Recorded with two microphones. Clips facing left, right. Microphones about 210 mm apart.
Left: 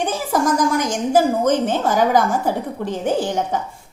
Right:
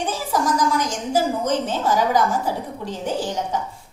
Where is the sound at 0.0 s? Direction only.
50° left (ahead or behind).